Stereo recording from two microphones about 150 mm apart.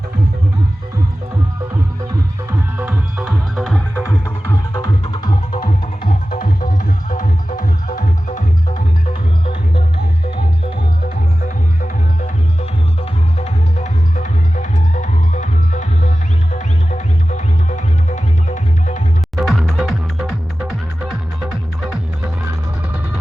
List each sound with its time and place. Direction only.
2.5 s music: 15° right (ahead or behind); by 4.0 s centre (ahead or behind)
4.7 s music: 30° left (ahead or behind)
7.1 s music: 65° left (ahead or behind)
11.0 s music: 60° left (ahead or behind)
13.4 s music: 50° left (ahead or behind)
19.4 s music: centre (ahead or behind)